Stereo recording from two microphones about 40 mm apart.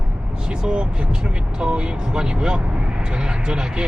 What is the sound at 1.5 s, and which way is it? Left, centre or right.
Speech, right.